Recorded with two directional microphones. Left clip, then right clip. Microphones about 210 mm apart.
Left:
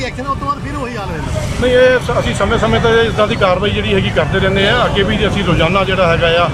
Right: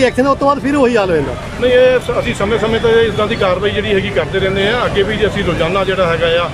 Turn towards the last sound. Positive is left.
turn(degrees=0)  # may be behind; listen again after turning